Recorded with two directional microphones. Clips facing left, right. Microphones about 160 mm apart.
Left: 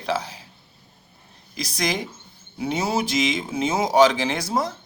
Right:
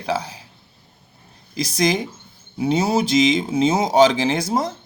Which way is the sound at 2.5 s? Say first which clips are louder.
Right 6 dB; 25° right (ahead or behind).